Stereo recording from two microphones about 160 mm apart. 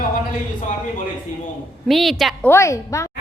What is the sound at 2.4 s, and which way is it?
Speech, 15° left (ahead or behind).